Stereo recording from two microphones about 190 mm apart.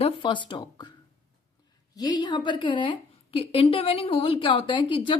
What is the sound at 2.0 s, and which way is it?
A woman's voice, 20° left (ahead or behind).